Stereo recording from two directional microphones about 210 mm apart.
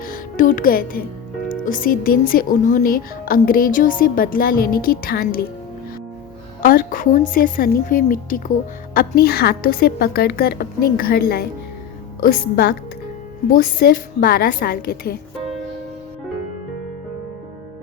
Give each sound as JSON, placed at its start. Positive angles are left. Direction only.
{"t": 0.0, "sound": "speech", "side_deg": 40}
{"t": 6.6, "sound": "a woman's voice", "side_deg": 40}